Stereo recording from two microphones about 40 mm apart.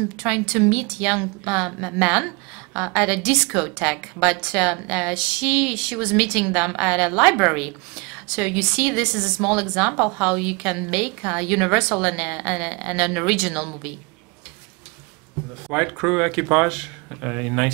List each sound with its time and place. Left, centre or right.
0.0 s a woman's voice: centre
15.4 s a sound: right
15.7 s a woman's voice: centre